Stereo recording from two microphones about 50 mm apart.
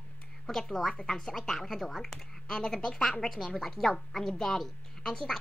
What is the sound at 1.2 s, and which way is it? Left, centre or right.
A woman's voice, centre.